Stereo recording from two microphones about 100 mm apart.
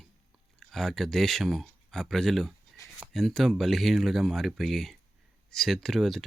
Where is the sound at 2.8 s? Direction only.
30° left (ahead or behind).